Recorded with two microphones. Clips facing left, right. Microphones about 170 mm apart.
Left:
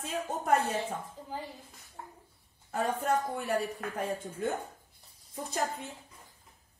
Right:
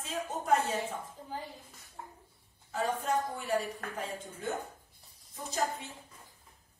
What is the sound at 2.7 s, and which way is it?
A woman's voice, 60° left (ahead or behind).